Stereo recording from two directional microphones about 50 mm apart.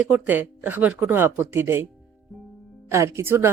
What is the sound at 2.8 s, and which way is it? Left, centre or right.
Speech, right.